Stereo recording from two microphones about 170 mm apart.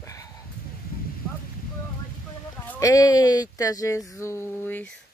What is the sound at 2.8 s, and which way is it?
Speech, 20° left (ahead or behind).